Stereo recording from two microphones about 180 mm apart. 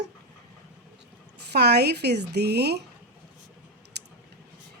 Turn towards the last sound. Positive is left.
turn(degrees=-65)  # may be behind; listen again after turning